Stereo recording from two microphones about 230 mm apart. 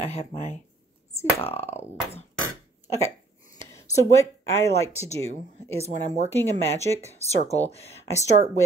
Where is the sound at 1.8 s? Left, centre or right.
Centre.